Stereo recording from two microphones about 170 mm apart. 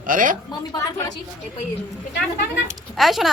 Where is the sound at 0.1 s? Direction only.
55° right (ahead or behind).